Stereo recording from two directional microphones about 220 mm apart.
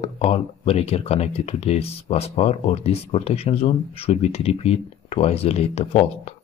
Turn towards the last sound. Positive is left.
turn(degrees=30)  # may be behind; listen again after turning